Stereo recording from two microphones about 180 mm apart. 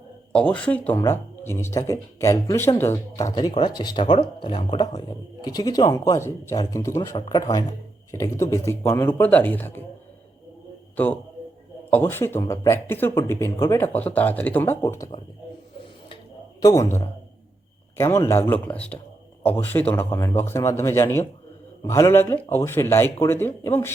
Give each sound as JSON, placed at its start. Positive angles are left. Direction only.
{"t": 0.3, "sound": "speech", "side_deg": 5}
{"t": 10.9, "sound": "a man's voice", "side_deg": 10}
{"t": 16.6, "sound": "a man's voice", "side_deg": 20}